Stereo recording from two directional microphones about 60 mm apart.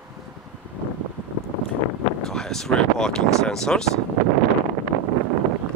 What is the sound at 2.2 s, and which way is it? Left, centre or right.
Speech, centre.